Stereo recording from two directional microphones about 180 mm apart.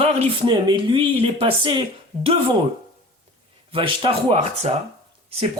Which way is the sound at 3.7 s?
30° right (ahead or behind).